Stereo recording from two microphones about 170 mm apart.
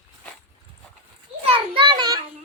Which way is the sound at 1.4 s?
30° right (ahead or behind).